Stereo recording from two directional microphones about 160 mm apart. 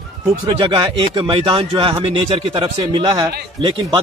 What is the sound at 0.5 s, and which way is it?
Speech, 30° right (ahead or behind).